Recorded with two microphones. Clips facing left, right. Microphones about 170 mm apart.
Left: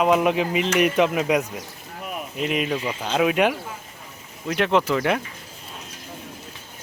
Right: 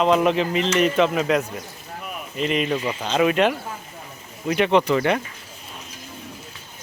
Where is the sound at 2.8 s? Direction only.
5° left (ahead or behind).